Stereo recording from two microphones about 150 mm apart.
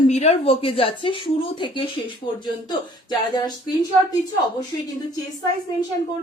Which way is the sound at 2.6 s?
30° left (ahead or behind).